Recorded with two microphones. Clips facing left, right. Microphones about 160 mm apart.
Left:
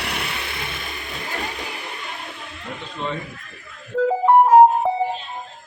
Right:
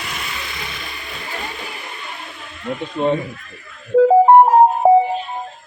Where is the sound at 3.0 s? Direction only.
50° right (ahead or behind).